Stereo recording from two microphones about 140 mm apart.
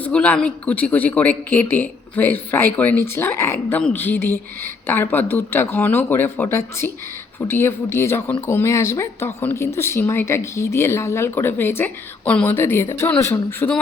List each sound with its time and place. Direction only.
0.0 s speech: 10° left (ahead or behind)